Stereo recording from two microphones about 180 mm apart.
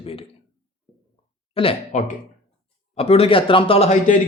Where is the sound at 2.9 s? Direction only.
35° left (ahead or behind).